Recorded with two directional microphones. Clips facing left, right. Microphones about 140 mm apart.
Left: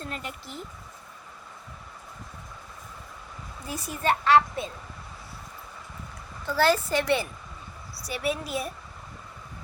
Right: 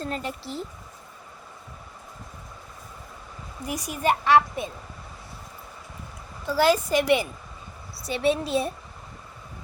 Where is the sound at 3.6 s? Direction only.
15° right (ahead or behind).